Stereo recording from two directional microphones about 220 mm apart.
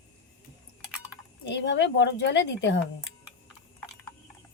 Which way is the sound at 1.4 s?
50° left (ahead or behind).